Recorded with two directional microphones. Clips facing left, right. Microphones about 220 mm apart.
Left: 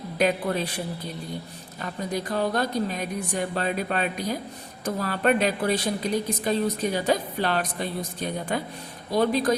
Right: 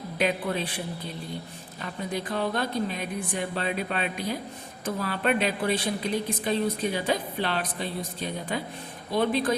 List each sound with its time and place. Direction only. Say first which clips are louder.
0.2 s a woman's voice: left 3 dB; 45° left (ahead or behind)
1.8 s a woman's voice: left 2 dB; 40° left (ahead or behind)